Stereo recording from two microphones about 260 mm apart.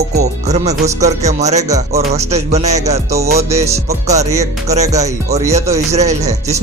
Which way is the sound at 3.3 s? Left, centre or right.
Centre.